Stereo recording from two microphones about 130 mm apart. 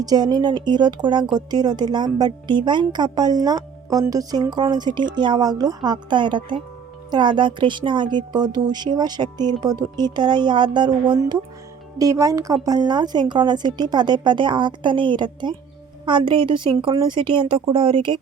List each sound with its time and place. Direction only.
0.0 s a woman's voice: 30° right (ahead or behind)
11.9 s a woman's voice: 25° right (ahead or behind)